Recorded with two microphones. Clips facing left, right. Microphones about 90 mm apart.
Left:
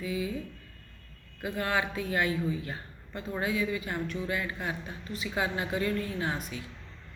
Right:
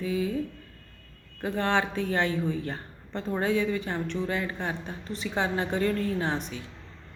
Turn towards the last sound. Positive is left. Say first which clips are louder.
# right 3 dB
turn(degrees=-25)  # may be behind; listen again after turning